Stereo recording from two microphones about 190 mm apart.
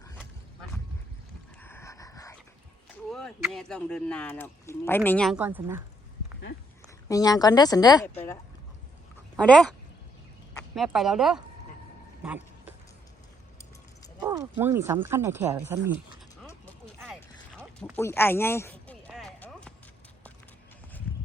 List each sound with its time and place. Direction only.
0.2 s a sound: 5° left (ahead or behind)
3.1 s speech: 5° left (ahead or behind)
5.4 s speech: 10° right (ahead or behind)
7.1 s speech: 20° left (ahead or behind)
9.4 s speech: 5° left (ahead or behind)
10.8 s speech: centre (ahead or behind)
12.2 s a sound: 5° right (ahead or behind)
14.2 s speech: 15° right (ahead or behind)
17.9 s speech: 10° left (ahead or behind)
19.1 s music: 5° left (ahead or behind)